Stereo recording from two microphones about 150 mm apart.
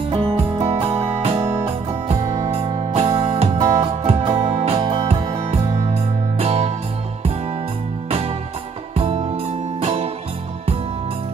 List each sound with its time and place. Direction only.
0.1 s music: 40° right (ahead or behind)
1.4 s music: 15° right (ahead or behind)
2.0 s music: 40° right (ahead or behind)
6.3 s music: 45° right (ahead or behind)
8.9 s music: 40° right (ahead or behind)